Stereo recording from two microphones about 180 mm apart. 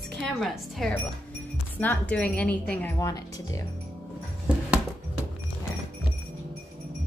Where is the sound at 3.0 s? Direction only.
20° left (ahead or behind).